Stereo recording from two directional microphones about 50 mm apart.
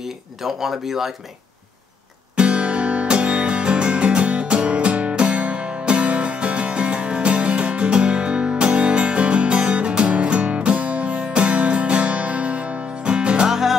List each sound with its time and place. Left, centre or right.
0.0 s speech: centre
2.3 s music: right
13.5 s music: centre